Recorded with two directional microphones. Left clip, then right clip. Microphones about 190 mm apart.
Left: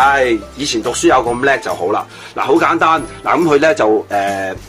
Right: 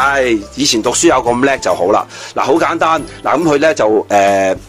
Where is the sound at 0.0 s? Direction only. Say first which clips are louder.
Left 1 dB; 40° right (ahead or behind).